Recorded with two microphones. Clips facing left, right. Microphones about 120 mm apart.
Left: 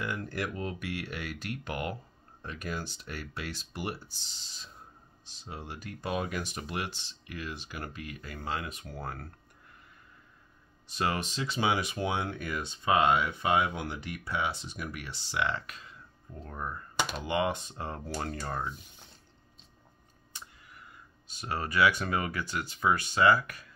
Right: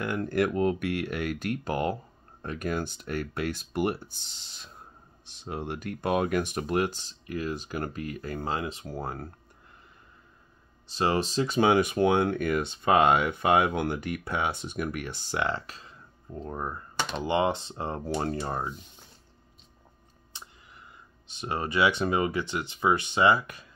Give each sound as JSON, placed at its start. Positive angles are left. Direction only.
{"t": 0.0, "sound": "speech", "side_deg": -55}
{"t": 2.4, "sound": "speech", "side_deg": -50}
{"t": 10.9, "sound": "speech", "side_deg": -30}
{"t": 21.3, "sound": "speech", "side_deg": -25}